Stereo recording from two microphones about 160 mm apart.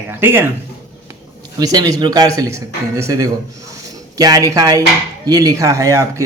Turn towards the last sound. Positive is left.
turn(degrees=-20)  # may be behind; listen again after turning